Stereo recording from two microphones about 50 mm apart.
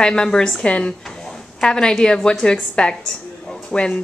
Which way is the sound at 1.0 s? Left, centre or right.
Centre.